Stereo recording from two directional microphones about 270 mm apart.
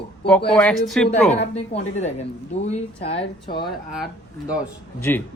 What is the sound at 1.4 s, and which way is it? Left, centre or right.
Speech, left.